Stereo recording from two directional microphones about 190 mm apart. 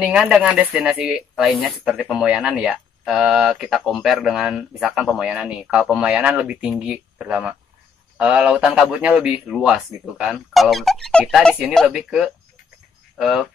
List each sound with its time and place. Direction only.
0.0 s speech: 5° right (ahead or behind)